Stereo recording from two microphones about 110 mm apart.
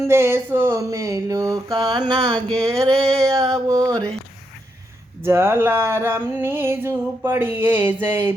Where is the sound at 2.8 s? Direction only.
60° right (ahead or behind).